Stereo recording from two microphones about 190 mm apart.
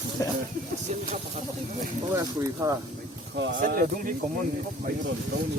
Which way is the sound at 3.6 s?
45° right (ahead or behind).